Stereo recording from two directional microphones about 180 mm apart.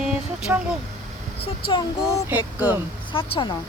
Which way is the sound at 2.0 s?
10° right (ahead or behind).